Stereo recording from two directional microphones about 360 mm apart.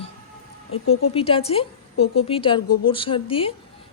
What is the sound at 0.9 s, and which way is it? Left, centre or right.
A woman's voice, centre.